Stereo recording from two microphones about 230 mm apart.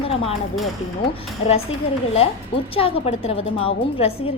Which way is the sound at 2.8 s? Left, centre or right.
Left.